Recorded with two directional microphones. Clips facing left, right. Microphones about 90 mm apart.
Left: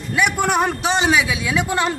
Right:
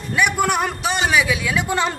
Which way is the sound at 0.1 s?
15° left (ahead or behind).